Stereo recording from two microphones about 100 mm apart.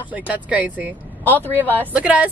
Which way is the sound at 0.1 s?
15° right (ahead or behind).